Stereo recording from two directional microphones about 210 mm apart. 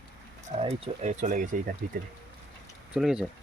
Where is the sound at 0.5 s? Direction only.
30° right (ahead or behind).